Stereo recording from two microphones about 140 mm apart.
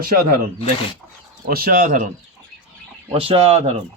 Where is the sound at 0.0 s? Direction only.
90° right.